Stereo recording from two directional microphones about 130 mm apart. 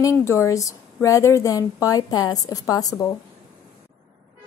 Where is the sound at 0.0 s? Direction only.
20° left (ahead or behind).